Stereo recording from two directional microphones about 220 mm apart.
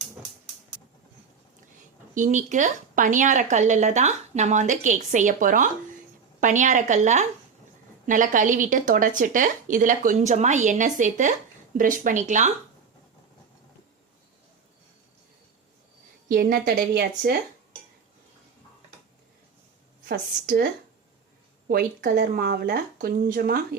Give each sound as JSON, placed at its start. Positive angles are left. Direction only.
{"t": 2.1, "sound": "speech", "side_deg": -35}
{"t": 16.3, "sound": "speech", "side_deg": -40}
{"t": 20.1, "sound": "speech", "side_deg": -40}
{"t": 21.7, "sound": "speech", "side_deg": -40}